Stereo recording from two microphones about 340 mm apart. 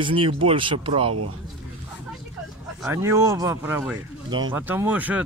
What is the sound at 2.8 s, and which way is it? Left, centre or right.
Speech, centre.